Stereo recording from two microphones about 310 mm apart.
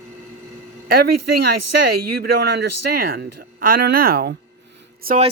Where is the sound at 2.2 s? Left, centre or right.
Right.